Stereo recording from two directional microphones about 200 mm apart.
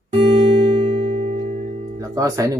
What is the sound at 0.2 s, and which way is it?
Music, 25° right (ahead or behind).